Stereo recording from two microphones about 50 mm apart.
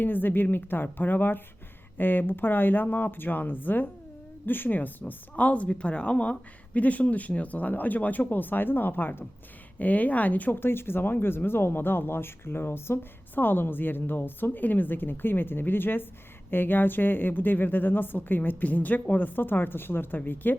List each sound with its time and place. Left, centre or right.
0.0 s a woman's voice: left
10.6 s a woman's voice: left